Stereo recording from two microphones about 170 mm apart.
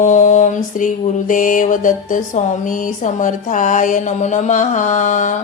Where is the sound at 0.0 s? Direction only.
45° left (ahead or behind).